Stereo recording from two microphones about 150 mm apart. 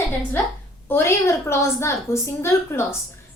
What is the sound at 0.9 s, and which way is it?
A woman's voice, 15° left (ahead or behind).